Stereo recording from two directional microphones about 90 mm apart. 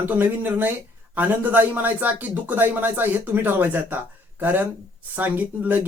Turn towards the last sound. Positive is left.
turn(degrees=-20)  # may be behind; listen again after turning